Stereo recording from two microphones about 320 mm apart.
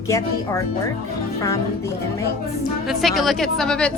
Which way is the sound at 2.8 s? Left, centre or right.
Centre.